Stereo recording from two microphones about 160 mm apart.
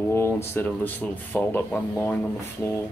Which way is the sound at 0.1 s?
15° left (ahead or behind).